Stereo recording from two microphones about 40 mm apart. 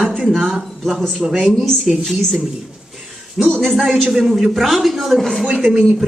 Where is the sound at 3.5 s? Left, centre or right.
Centre.